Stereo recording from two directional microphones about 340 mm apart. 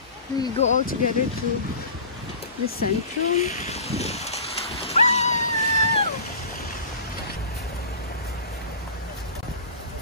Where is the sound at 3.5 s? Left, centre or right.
Centre.